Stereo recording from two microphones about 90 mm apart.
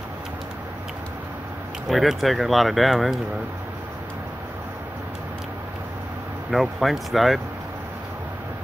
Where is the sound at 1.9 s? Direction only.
Centre (ahead or behind).